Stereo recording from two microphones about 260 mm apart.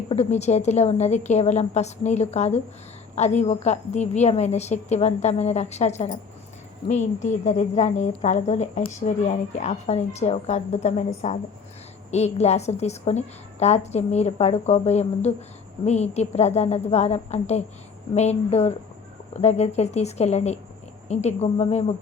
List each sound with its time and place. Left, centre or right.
0.1 s a woman's voice: left